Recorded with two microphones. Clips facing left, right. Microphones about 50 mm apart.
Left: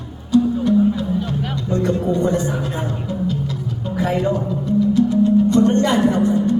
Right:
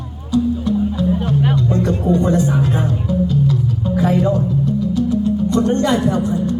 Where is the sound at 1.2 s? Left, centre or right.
Right.